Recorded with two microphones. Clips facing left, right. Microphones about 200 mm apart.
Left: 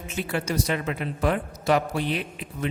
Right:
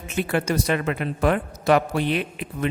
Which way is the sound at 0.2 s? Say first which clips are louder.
Right 4 dB; 55° right (ahead or behind).